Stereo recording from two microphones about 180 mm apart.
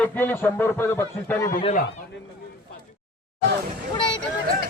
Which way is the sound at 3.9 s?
30° left (ahead or behind).